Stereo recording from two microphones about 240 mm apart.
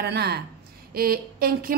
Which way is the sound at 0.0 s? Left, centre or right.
Right.